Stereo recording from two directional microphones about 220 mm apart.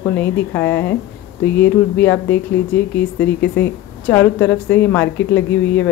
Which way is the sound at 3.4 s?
50° left (ahead or behind).